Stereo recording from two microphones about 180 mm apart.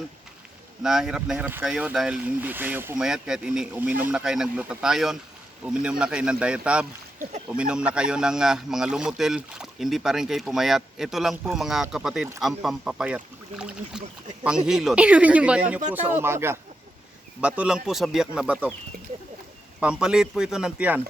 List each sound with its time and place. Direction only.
0.8 s speech: centre (ahead or behind)
19.8 s speech: 5° right (ahead or behind)